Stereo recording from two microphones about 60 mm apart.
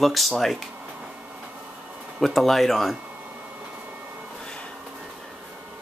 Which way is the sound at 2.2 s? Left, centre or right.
Centre.